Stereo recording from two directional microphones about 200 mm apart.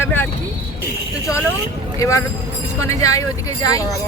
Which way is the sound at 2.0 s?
15° left (ahead or behind).